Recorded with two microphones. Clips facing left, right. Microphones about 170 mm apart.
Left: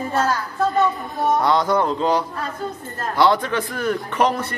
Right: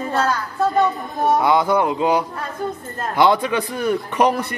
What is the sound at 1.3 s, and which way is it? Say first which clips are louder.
Speech: right 1 dB; 10° right (ahead or behind).